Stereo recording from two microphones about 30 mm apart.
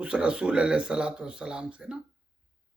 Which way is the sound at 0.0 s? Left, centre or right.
Right.